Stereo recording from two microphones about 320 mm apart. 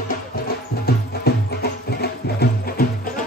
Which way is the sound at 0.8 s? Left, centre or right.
Left.